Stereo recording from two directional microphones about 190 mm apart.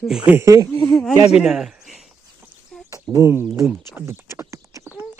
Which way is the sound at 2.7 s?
5° left (ahead or behind).